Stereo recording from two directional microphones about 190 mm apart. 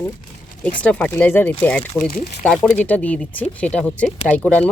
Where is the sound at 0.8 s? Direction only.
5° left (ahead or behind).